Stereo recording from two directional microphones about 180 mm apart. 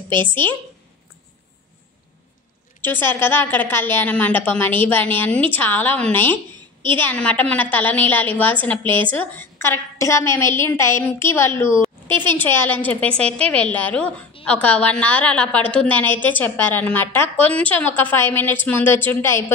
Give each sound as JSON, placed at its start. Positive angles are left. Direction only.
{"t": 2.8, "sound": "a woman's voice", "side_deg": 10}